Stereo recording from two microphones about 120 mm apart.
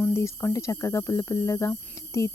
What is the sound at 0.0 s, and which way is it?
Speech, 25° left (ahead or behind).